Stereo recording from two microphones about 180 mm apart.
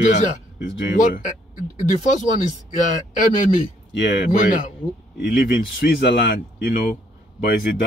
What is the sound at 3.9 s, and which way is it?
Speech, 70° left (ahead or behind).